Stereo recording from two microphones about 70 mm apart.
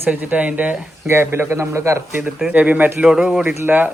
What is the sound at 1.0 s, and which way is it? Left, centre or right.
A man's voice, right.